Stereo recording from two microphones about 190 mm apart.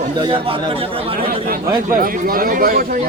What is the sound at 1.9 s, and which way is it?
Speech, 45° right (ahead or behind).